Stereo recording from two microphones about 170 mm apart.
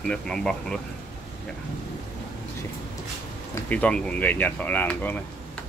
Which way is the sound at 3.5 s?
10° left (ahead or behind).